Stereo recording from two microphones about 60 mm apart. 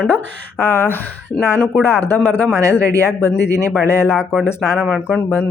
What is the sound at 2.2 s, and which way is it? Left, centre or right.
Speech, left.